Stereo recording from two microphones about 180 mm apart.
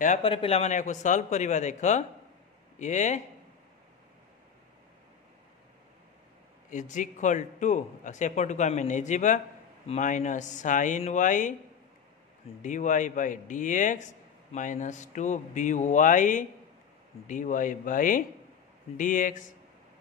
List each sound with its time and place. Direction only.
0.0 s a man's voice: 40° left (ahead or behind)
0.3 s a man's voice: 30° left (ahead or behind)
6.7 s a man's voice: 45° left (ahead or behind)
12.6 s a man's voice: 45° left (ahead or behind)